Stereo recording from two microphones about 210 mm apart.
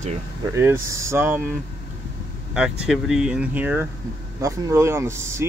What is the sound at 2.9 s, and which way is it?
Speech, 5° right (ahead or behind).